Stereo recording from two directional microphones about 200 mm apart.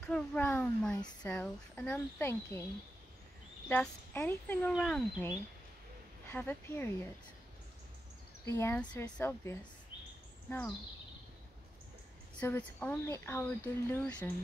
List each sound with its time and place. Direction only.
0.0 s a sound: 10° left (ahead or behind)
1.2 s a woman's voice: 5° left (ahead or behind)
3.6 s a woman's voice: 10° left (ahead or behind)
8.5 s a woman's voice: 10° left (ahead or behind)
12.4 s a woman's voice: 10° left (ahead or behind)